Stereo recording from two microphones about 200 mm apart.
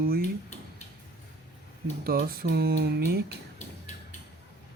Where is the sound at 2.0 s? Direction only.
50° right (ahead or behind).